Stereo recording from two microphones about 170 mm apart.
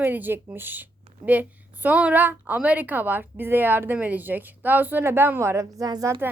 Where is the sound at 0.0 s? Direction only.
10° right (ahead or behind).